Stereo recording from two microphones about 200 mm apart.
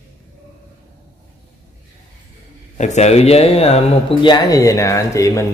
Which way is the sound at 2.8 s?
35° left (ahead or behind).